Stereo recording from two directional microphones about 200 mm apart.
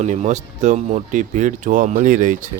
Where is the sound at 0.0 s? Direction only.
35° right (ahead or behind).